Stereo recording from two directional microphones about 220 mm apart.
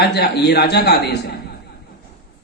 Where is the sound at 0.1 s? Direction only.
50° left (ahead or behind).